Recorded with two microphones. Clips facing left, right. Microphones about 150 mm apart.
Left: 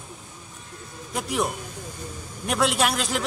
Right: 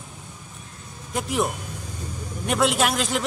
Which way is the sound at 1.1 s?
Centre (ahead or behind).